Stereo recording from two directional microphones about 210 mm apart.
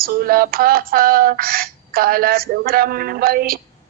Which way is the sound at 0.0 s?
45° right (ahead or behind).